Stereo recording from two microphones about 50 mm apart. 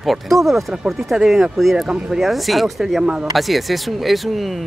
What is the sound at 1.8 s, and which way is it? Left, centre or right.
Speech, centre.